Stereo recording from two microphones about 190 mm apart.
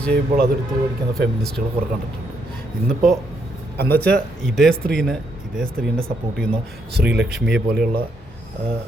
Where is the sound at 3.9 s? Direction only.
5° left (ahead or behind).